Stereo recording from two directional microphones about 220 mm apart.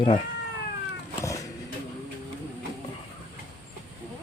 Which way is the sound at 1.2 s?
15° left (ahead or behind).